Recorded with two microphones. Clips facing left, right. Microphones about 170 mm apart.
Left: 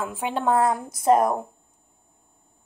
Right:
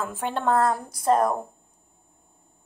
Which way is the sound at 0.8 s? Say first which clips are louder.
Left 2 dB; 20° left (ahead or behind).